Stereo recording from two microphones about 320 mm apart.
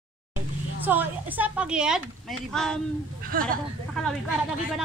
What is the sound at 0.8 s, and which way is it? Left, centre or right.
Speech, centre.